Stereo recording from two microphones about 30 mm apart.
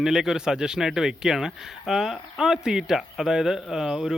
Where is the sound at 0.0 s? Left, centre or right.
Centre.